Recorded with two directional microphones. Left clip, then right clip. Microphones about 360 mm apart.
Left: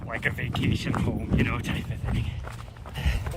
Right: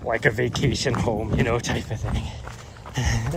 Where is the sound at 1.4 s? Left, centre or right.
Centre.